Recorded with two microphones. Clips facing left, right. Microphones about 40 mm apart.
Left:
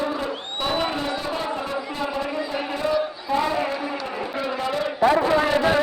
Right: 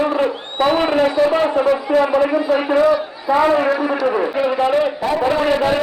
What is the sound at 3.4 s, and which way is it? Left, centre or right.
Speech, right.